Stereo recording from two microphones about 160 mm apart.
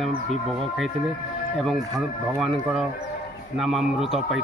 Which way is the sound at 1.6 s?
Centre (ahead or behind).